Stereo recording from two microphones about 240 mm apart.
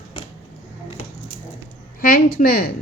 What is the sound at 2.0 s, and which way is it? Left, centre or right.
Speech, left.